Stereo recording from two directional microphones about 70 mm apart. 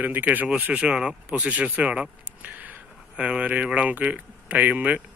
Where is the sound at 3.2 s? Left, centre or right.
Centre.